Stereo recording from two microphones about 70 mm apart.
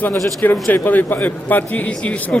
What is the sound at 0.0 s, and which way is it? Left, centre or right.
A man's voice, left.